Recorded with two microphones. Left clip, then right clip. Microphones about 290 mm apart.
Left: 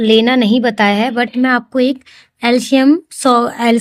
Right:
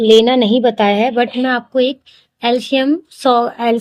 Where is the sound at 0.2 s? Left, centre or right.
Left.